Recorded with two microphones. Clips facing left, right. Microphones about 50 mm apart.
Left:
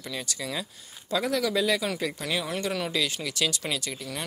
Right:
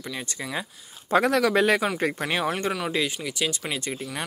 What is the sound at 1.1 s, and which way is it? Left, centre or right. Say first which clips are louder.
Speech: right 6 dB; right.